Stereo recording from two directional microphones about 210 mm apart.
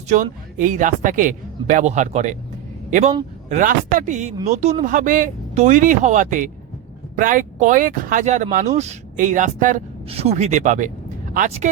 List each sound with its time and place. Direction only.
0.1 s speech: 40° right (ahead or behind)